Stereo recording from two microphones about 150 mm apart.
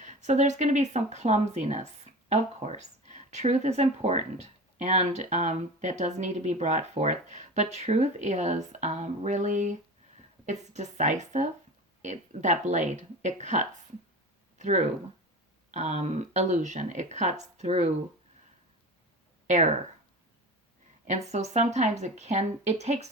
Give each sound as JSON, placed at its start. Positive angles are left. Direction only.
{"t": 0.0, "sound": "speech", "side_deg": -50}
{"t": 19.5, "sound": "speech", "side_deg": -50}
{"t": 21.1, "sound": "speech", "side_deg": -50}